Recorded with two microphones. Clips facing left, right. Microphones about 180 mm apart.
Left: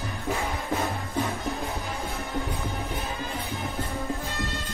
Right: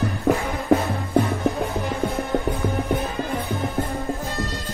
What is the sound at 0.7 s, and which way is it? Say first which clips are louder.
Music: right 11 dB; 70° right (ahead or behind).